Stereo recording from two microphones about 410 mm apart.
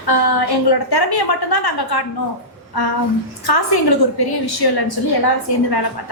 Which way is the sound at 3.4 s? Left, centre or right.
Left.